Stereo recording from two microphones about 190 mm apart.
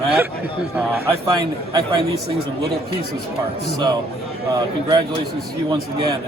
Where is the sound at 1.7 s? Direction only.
20° right (ahead or behind).